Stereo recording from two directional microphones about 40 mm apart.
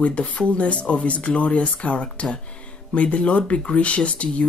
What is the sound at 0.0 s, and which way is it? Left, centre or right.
Speech, left.